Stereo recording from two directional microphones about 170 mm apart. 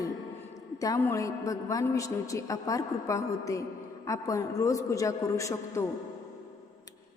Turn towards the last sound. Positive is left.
turn(degrees=15)  # may be behind; listen again after turning